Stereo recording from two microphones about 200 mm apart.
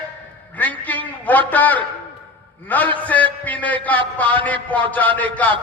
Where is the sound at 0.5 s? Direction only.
10° left (ahead or behind).